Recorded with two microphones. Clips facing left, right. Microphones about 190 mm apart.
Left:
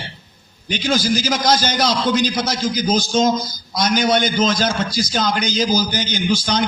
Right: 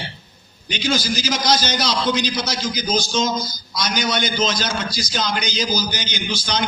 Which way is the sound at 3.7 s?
50° left (ahead or behind).